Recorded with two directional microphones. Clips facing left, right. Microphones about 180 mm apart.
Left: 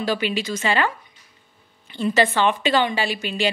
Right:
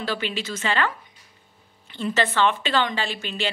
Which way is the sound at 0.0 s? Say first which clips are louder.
Left 5 dB; 15° left (ahead or behind).